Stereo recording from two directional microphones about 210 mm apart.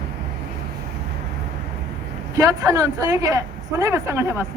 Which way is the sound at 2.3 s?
15° right (ahead or behind).